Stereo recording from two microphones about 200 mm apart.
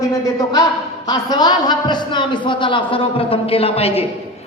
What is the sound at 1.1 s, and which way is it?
A man's voice, 20° left (ahead or behind).